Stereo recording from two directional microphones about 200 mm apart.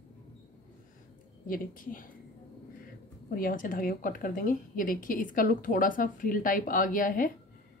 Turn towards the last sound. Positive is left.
turn(degrees=45)  # may be behind; listen again after turning